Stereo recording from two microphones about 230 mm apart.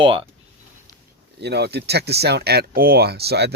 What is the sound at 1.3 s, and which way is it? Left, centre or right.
Speech, right.